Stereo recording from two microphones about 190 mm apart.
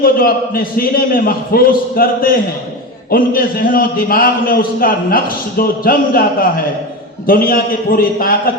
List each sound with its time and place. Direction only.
0.0 s a man's voice: 50° left (ahead or behind)
7.3 s a man's voice: 50° left (ahead or behind)